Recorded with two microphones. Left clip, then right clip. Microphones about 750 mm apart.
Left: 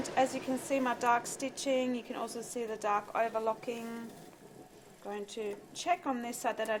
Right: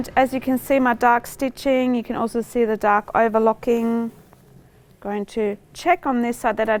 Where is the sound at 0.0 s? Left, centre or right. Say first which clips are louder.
Right 12 dB; right.